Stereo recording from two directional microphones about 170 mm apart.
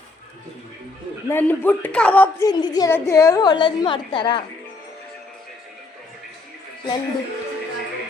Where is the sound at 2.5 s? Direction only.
25° left (ahead or behind).